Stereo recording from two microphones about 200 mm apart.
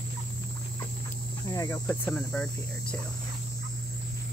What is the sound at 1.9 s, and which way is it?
Speech, 5° left (ahead or behind).